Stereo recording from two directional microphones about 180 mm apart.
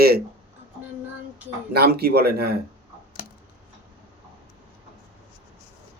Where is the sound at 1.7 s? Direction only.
60° right (ahead or behind).